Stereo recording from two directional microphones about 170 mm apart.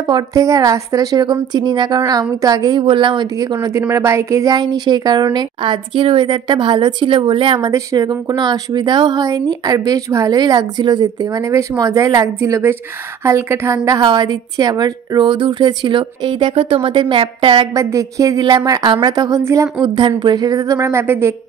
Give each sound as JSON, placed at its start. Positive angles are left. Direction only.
{"t": 0.1, "sound": "a woman's voice", "side_deg": -20}